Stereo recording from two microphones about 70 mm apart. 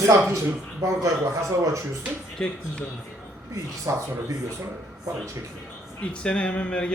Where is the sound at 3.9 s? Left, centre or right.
Right.